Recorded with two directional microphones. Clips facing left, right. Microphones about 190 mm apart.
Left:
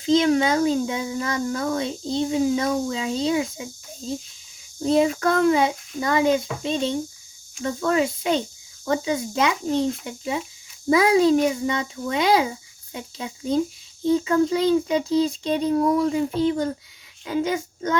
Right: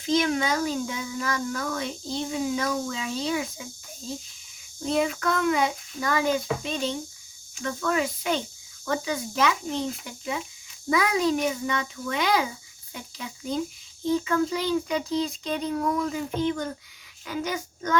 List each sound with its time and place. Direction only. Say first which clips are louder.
0.0 s a child's voice: left 6 dB; 30° left (ahead or behind)
10.8 s a child's voice: left 7 dB; 30° left (ahead or behind)